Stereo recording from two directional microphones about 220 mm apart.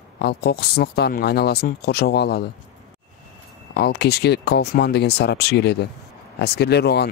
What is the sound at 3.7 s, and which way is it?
Speech, 45° left (ahead or behind).